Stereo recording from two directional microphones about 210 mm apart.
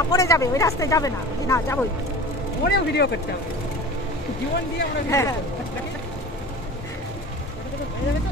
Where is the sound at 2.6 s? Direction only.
50° left (ahead or behind).